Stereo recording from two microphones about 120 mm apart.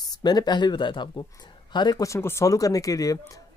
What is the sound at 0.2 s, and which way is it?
Speech, 35° left (ahead or behind).